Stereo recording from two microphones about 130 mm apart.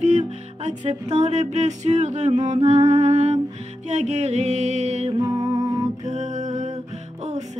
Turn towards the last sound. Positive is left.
turn(degrees=-65)  # may be behind; listen again after turning